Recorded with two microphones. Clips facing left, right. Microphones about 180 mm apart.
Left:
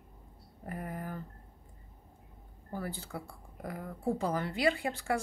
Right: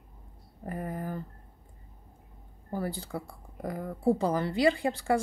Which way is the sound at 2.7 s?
35° right (ahead or behind).